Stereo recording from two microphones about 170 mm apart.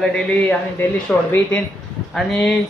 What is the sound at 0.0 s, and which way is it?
A woman's voice, 10° left (ahead or behind).